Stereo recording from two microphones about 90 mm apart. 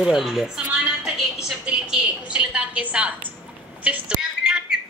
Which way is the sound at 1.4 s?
10° right (ahead or behind).